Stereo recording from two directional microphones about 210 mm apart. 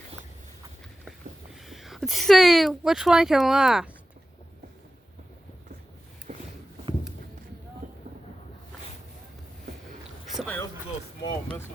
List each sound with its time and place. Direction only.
1.5 s speech: centre (ahead or behind)
6.3 s a sound: 35° right (ahead or behind)
7.8 s vehicle: 35° right (ahead or behind)
10.2 s boat: centre (ahead or behind)
11.2 s speech: 20° left (ahead or behind)